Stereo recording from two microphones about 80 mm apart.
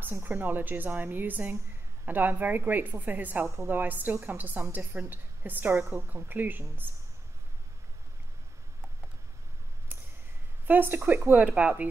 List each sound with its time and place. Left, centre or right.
0.0 s a woman's voice: right
10.7 s a woman's voice: right